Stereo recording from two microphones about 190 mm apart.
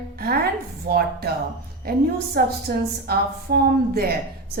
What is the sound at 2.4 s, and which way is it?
A woman's voice, 55° right (ahead or behind).